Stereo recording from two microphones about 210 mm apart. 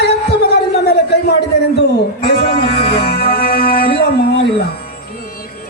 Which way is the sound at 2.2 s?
45° left (ahead or behind).